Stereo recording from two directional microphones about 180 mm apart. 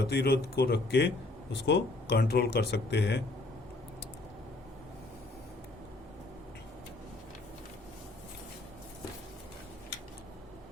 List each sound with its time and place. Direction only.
0.1 s speech: 65° left (ahead or behind)